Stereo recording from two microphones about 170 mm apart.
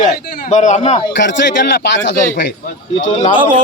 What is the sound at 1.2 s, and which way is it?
Speech, 90° left.